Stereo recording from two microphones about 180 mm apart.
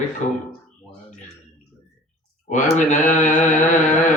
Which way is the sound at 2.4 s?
40° left (ahead or behind).